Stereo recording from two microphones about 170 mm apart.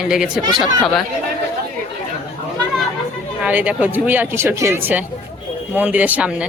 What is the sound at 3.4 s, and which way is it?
Speech, 10° right (ahead or behind).